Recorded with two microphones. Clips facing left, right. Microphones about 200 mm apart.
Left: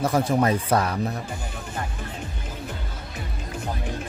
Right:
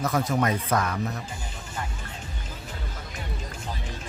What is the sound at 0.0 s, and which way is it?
Speech, 30° left (ahead or behind).